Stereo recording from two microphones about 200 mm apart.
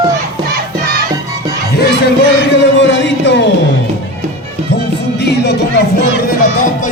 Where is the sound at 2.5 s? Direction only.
65° left (ahead or behind).